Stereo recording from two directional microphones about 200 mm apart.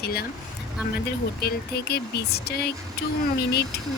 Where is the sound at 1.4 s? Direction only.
55° left (ahead or behind).